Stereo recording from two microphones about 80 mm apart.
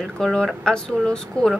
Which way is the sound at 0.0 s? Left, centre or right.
Centre.